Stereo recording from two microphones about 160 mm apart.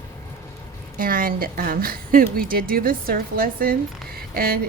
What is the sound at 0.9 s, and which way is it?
A woman's voice, 65° right (ahead or behind).